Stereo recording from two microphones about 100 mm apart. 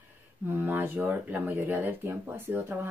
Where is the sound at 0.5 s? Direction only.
20° right (ahead or behind).